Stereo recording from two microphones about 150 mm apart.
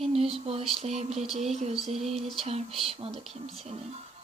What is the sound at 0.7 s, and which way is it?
Music, 45° right (ahead or behind).